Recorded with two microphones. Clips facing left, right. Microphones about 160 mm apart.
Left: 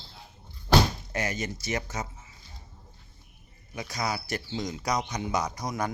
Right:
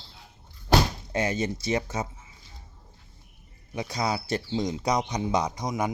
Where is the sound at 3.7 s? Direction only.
25° right (ahead or behind).